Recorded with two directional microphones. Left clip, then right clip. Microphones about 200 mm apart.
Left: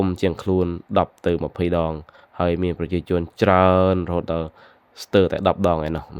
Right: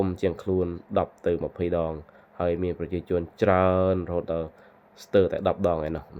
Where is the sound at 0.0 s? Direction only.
40° left (ahead or behind).